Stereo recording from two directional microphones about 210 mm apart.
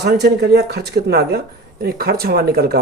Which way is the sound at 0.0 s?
50° right (ahead or behind).